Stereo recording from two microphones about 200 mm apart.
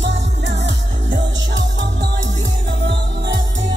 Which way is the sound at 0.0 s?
60° right (ahead or behind).